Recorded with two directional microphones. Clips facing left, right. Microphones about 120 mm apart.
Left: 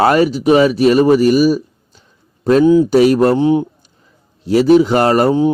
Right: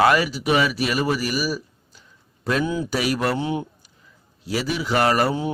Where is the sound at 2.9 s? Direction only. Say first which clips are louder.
Left 12 dB; 30° left (ahead or behind).